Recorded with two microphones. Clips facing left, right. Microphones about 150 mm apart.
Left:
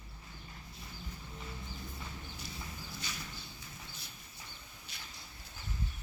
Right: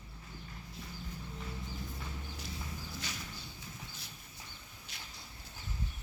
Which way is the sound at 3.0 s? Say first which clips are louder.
Even; 90° right.